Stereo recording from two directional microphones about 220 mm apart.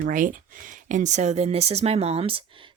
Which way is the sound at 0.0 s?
35° right (ahead or behind).